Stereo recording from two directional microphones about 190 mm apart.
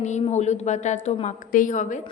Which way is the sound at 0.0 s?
35° left (ahead or behind).